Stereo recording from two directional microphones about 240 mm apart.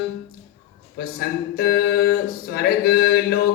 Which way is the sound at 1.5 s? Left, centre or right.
Left.